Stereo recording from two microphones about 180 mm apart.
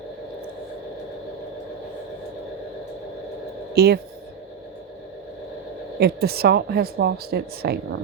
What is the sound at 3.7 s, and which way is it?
Speech, 60° right (ahead or behind).